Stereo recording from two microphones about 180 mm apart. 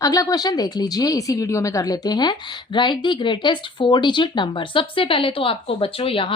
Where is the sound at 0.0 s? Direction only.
20° left (ahead or behind).